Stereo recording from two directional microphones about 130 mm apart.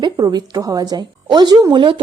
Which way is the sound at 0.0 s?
30° right (ahead or behind).